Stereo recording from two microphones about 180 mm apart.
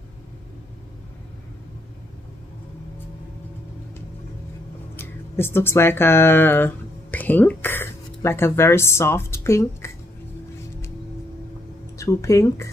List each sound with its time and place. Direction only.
4.9 s speech: 15° left (ahead or behind)
12.0 s speech: 15° left (ahead or behind)